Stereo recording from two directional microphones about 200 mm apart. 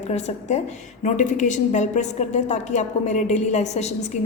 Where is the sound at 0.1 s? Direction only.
35° left (ahead or behind).